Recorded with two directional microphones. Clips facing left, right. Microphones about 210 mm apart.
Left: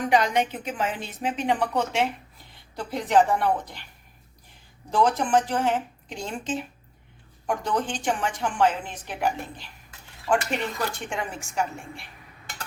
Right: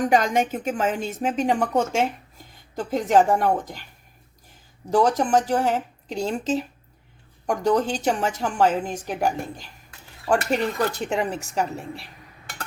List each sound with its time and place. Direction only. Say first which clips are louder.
0.0 s a woman's voice: right 2 dB; 45° right (ahead or behind)
4.9 s a woman's voice: right 3 dB; 40° right (ahead or behind)